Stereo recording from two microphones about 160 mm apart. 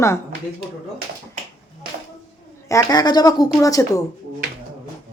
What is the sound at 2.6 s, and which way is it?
A woman's voice, 20° left (ahead or behind).